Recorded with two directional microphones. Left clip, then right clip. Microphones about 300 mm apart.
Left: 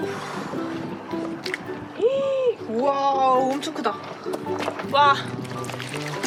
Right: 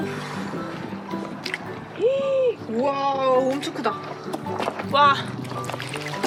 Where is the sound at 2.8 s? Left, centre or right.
Centre.